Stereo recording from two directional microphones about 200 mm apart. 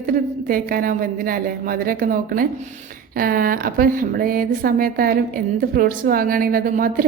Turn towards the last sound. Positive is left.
turn(degrees=-45)  # may be behind; listen again after turning